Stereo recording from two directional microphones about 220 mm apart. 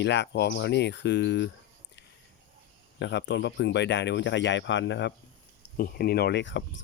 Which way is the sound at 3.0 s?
55° left (ahead or behind).